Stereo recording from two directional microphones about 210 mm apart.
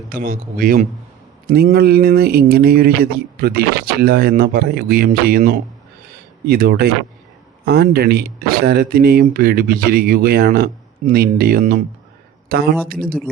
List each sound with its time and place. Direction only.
0.1 s speech: 40° right (ahead or behind)